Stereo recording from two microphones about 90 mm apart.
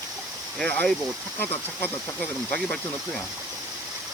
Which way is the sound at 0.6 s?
15° left (ahead or behind).